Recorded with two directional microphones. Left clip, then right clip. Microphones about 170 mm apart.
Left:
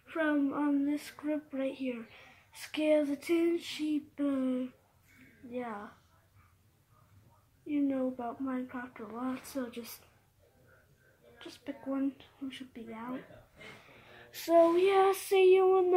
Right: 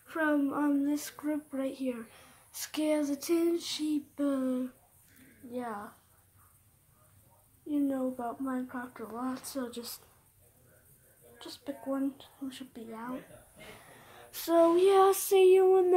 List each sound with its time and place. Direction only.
0.0 s speech: 15° right (ahead or behind)
7.6 s speech: 15° right (ahead or behind)
11.3 s speech: 15° right (ahead or behind)
14.0 s female singing: 25° right (ahead or behind)